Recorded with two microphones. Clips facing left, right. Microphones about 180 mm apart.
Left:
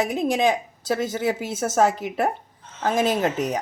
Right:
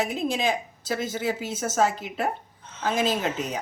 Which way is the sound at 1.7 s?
60° left (ahead or behind).